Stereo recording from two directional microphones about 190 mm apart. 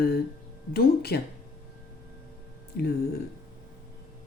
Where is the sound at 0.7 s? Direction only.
55° left (ahead or behind).